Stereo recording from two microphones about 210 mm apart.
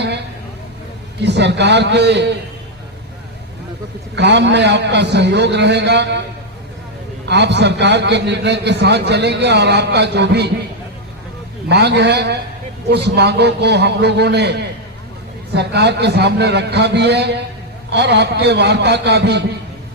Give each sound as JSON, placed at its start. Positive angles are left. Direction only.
{"t": 1.2, "sound": "a man's voice", "side_deg": -55}
{"t": 4.1, "sound": "a man's voice", "side_deg": -55}
{"t": 7.3, "sound": "a man's voice", "side_deg": -55}
{"t": 11.7, "sound": "a man's voice", "side_deg": -55}